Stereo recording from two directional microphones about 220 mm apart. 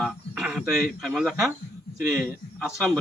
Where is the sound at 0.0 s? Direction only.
Centre (ahead or behind).